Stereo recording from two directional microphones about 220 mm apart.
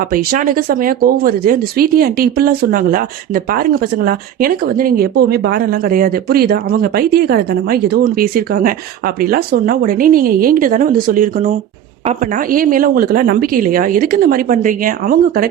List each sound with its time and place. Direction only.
0.1 s speech: 40° right (ahead or behind)